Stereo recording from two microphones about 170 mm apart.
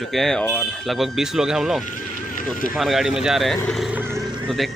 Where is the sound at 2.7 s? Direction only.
Centre (ahead or behind).